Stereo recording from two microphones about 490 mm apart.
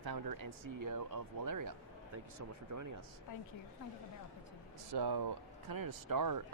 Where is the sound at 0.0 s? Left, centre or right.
Right.